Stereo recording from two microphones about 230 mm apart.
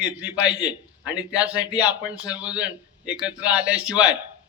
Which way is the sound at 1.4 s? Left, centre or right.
Centre.